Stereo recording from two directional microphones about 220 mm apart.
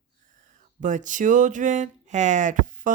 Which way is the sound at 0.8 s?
35° right (ahead or behind).